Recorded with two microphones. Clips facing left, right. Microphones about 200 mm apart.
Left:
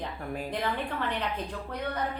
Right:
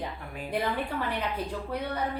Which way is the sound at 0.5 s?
10° right (ahead or behind).